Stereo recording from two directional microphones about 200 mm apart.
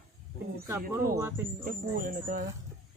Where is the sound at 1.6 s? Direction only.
45° right (ahead or behind).